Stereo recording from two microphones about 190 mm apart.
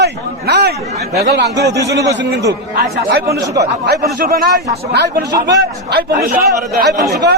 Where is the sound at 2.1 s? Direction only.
65° right (ahead or behind).